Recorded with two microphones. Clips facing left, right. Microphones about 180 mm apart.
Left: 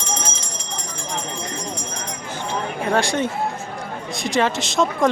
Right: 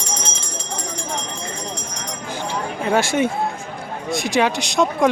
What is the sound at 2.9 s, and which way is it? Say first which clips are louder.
Speech: right 3 dB; 5° right (ahead or behind).